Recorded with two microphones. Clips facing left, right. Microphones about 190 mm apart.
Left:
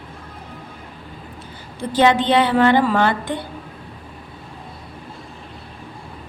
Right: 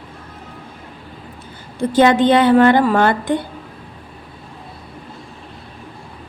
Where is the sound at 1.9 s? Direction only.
50° right (ahead or behind).